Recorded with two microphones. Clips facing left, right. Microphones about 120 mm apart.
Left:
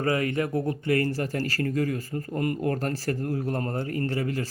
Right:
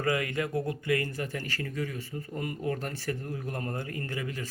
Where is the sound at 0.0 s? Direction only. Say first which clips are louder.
Left 4 dB; 30° left (ahead or behind).